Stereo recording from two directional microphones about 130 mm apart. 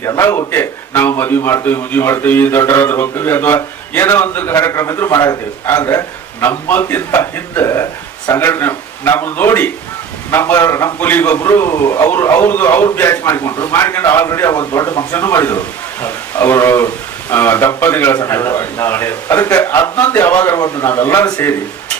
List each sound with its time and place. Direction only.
0.0 s a man's voice: 20° left (ahead or behind)